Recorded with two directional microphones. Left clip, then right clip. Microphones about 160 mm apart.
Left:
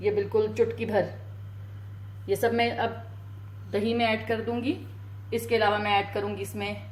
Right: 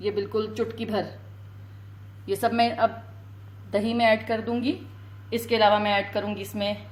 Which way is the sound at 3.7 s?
35° right (ahead or behind).